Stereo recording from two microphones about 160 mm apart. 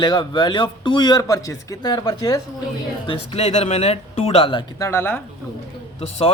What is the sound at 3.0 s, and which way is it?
A man's voice, 35° left (ahead or behind).